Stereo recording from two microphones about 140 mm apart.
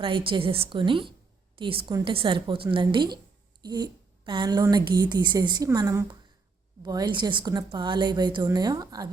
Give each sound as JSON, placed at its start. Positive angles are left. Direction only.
{"t": 0.0, "sound": "a woman's voice", "side_deg": -40}